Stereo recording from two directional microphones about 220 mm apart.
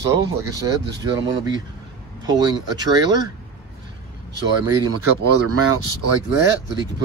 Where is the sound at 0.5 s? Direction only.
15° right (ahead or behind).